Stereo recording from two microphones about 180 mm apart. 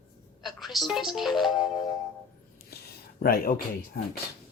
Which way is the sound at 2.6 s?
60° left (ahead or behind).